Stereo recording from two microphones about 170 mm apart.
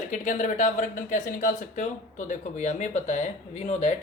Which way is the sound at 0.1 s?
45° left (ahead or behind).